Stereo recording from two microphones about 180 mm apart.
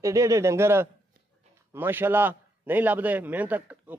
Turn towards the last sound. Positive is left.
turn(degrees=-10)  # may be behind; listen again after turning